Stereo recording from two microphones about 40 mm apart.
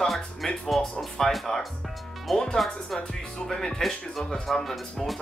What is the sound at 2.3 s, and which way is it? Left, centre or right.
Speech, centre.